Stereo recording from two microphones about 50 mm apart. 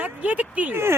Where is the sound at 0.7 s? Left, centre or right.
Right.